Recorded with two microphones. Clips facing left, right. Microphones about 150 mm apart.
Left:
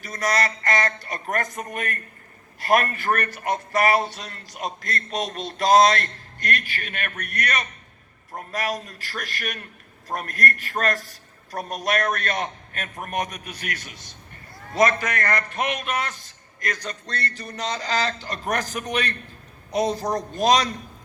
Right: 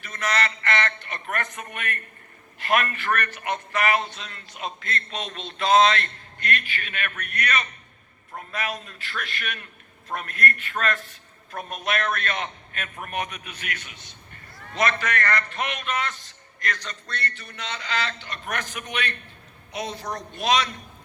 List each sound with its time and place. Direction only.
0.0 s a man's voice: 40° left (ahead or behind)